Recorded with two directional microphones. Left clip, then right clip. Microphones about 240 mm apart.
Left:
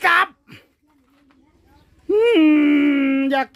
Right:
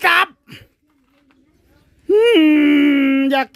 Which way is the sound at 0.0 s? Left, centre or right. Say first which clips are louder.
Right 2 dB; centre.